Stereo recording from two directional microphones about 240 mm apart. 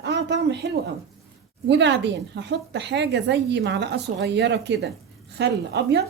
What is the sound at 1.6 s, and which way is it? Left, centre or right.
Speech, right.